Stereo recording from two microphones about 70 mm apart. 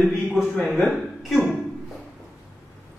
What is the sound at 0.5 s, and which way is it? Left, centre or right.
Speech, centre.